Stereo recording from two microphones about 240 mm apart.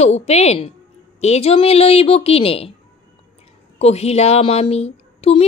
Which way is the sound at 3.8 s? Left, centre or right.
Left.